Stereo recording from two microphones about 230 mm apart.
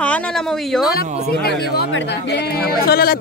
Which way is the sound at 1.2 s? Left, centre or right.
Left.